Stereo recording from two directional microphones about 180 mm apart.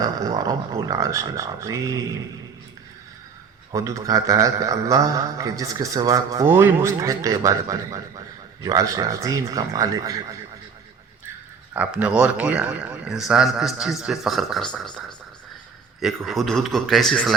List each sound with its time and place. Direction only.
0.0 s a sound: 20° right (ahead or behind)
0.9 s speech: 15° right (ahead or behind)
3.7 s a man's voice: 15° right (ahead or behind)
11.7 s speech: 10° right (ahead or behind)